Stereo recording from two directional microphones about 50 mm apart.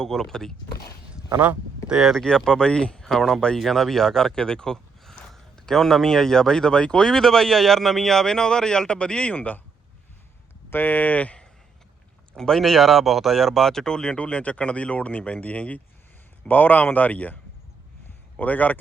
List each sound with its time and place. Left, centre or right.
0.0 s speech: centre
1.3 s speech: right
2.2 s speech: centre
9.3 s speech: left
10.7 s speech: left
12.4 s speech: centre; by 18.8 s left